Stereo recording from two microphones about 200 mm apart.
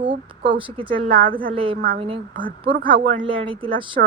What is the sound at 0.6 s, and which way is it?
A woman's voice, 25° right (ahead or behind).